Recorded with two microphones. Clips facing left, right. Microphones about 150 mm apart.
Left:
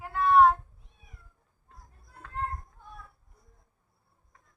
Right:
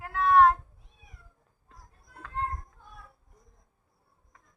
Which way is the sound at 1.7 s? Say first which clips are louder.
Even; 90° right.